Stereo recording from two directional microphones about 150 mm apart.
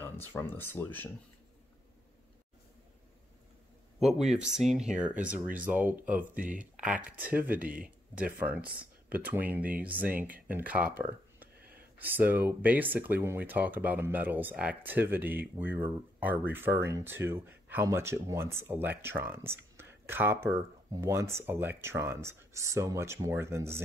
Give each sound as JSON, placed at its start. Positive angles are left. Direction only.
{"t": 0.3, "sound": "speech", "side_deg": 15}
{"t": 4.0, "sound": "speech", "side_deg": 0}